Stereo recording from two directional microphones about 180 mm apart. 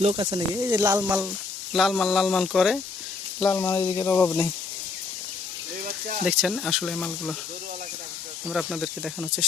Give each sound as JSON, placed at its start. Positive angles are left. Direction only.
{"t": 0.0, "sound": "speech", "side_deg": -35}
{"t": 0.3, "sound": "speech", "side_deg": -20}
{"t": 3.4, "sound": "speech", "side_deg": 15}
{"t": 5.8, "sound": "a sound", "side_deg": -45}
{"t": 6.2, "sound": "speech", "side_deg": 0}
{"t": 8.4, "sound": "speech", "side_deg": 0}